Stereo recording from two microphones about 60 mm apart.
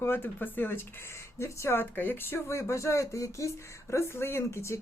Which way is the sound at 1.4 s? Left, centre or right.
Left.